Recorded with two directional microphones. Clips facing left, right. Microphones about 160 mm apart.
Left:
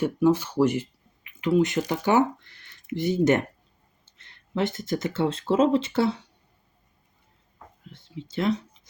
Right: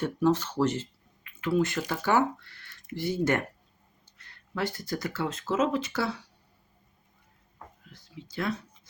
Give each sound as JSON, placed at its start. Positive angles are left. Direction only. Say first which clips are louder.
{"t": 0.0, "sound": "speech", "louder": "left 4 dB", "side_deg": 10}
{"t": 7.9, "sound": "speech", "louder": "left 10 dB", "side_deg": 25}